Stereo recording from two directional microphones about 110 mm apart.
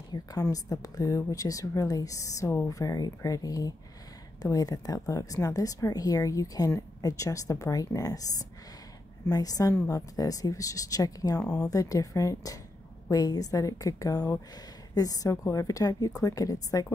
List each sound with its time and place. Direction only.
0.1 s speech: 35° left (ahead or behind)